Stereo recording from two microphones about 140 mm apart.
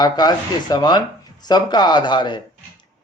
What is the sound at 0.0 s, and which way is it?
Speech, 30° left (ahead or behind).